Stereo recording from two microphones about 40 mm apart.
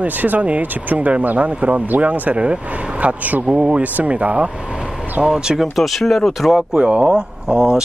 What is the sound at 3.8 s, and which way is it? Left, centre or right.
Speech, right.